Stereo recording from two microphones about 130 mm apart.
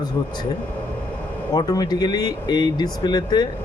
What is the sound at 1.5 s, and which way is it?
Speech, 30° left (ahead or behind).